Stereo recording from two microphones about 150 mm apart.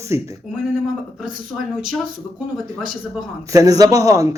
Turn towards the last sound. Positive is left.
turn(degrees=-20)  # may be behind; listen again after turning